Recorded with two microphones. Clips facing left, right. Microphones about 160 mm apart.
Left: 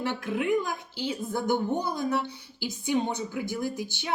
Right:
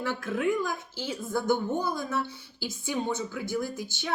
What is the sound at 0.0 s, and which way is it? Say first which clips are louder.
A woman's voice: even; 15° left (ahead or behind).